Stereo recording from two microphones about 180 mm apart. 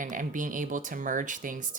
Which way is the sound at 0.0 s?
45° right (ahead or behind).